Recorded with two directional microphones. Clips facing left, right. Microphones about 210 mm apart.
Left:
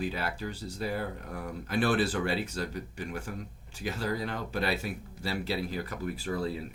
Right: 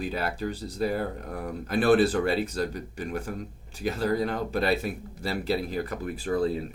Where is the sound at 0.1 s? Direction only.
45° right (ahead or behind).